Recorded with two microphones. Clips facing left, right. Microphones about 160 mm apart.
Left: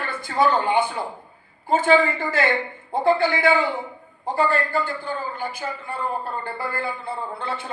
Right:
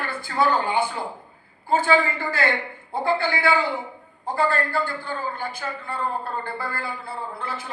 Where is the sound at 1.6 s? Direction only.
15° left (ahead or behind).